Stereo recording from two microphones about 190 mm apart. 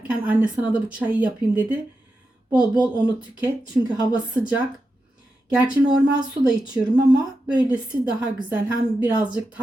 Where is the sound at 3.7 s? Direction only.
20° right (ahead or behind).